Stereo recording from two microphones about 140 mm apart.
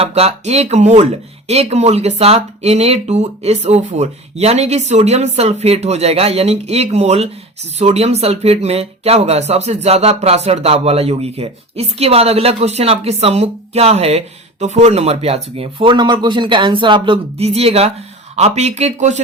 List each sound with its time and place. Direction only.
0.0 s speech: 45° right (ahead or behind)